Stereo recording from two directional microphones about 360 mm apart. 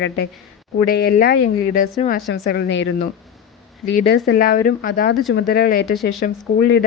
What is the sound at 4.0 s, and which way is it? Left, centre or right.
Speech, left.